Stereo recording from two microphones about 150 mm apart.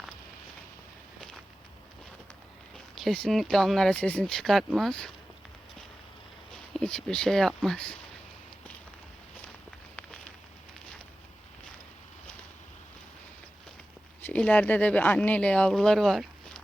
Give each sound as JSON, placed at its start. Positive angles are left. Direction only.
{"t": 2.9, "sound": "speech", "side_deg": 0}
{"t": 6.5, "sound": "speech", "side_deg": 5}
{"t": 14.2, "sound": "speech", "side_deg": 10}